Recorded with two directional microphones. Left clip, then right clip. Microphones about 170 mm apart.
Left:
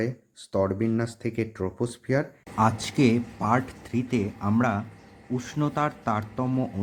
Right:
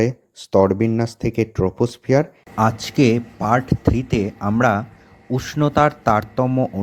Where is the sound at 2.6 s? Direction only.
25° right (ahead or behind).